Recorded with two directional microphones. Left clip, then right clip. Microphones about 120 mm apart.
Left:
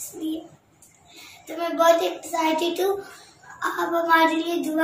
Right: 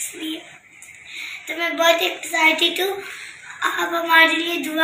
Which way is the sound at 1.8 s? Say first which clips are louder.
Even; 15° left (ahead or behind).